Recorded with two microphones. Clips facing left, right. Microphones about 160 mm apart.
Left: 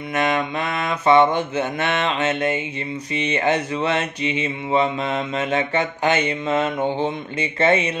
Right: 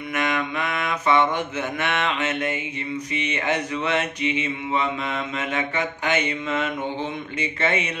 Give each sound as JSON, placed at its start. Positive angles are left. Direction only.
{"t": 0.1, "sound": "mantra", "side_deg": 30}